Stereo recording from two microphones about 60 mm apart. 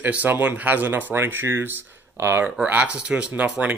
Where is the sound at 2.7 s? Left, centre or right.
Right.